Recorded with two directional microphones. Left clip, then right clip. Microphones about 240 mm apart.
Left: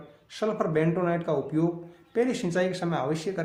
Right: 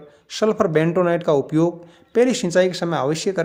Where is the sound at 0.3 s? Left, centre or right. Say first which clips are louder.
Right 9 dB; right.